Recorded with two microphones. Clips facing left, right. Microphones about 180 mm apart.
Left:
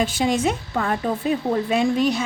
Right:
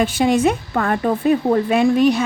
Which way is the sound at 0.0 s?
60° right (ahead or behind).